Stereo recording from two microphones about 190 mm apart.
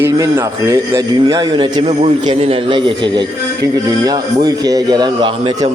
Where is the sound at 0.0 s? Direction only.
15° right (ahead or behind).